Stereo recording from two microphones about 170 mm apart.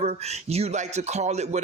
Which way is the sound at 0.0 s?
40° right (ahead or behind).